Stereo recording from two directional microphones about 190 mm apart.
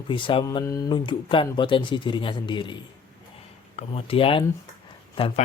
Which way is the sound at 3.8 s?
30° left (ahead or behind).